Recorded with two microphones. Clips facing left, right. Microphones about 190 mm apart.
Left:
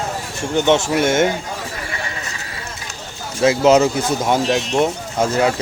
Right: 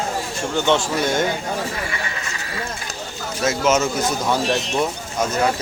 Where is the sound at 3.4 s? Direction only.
35° left (ahead or behind).